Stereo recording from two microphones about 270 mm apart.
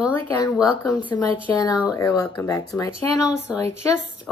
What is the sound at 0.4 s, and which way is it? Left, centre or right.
Speech, centre.